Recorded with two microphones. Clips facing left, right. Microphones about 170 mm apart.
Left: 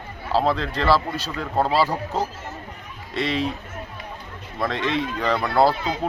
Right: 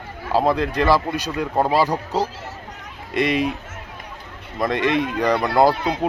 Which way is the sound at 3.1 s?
15° right (ahead or behind).